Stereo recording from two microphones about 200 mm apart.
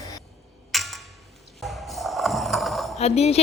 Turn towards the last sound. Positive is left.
turn(degrees=30)  # may be behind; listen again after turning